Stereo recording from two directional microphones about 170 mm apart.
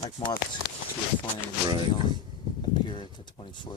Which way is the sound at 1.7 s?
25° right (ahead or behind).